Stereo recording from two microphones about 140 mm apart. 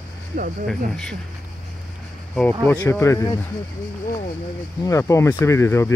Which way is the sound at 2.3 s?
5° left (ahead or behind).